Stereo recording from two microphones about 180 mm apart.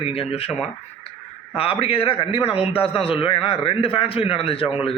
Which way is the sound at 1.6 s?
30° left (ahead or behind).